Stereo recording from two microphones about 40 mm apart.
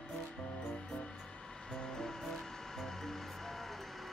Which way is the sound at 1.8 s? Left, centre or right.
Centre.